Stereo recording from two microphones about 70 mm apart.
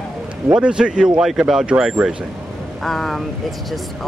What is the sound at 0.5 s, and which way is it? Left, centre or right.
Speech, centre.